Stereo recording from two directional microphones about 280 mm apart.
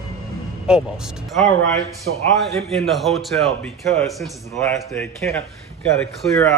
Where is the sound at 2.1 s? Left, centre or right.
Right.